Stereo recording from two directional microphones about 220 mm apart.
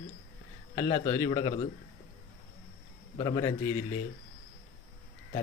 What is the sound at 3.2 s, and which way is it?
Speech, 20° left (ahead or behind).